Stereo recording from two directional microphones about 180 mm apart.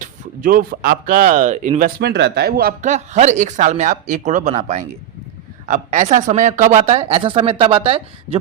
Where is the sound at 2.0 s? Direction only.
65° right (ahead or behind).